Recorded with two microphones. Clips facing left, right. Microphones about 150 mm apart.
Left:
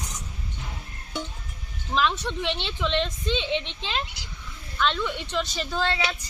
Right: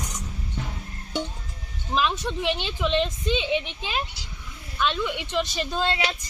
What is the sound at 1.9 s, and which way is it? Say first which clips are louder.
Speech: even; 15° right (ahead or behind).